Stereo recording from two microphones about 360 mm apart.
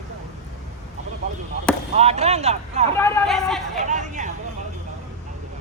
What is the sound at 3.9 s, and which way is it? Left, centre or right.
Vehicle, centre.